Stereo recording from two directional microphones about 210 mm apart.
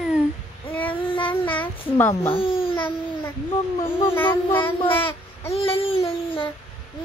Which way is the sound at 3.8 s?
10° left (ahead or behind).